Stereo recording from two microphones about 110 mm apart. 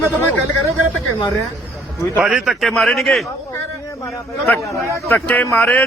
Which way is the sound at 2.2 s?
5° right (ahead or behind).